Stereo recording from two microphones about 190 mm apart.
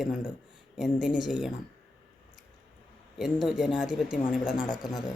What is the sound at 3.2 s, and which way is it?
Speech, centre (ahead or behind).